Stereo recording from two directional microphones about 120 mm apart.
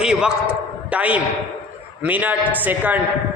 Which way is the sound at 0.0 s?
5° right (ahead or behind).